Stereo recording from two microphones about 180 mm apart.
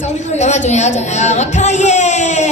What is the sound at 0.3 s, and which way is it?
Speech, 40° left (ahead or behind).